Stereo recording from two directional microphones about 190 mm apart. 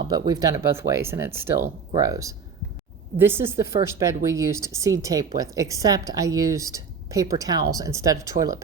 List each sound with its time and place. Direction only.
0.3 s speech: 20° right (ahead or behind)